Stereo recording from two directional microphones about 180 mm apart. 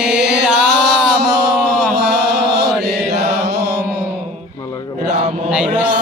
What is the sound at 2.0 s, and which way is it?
Chant, 65° right (ahead or behind).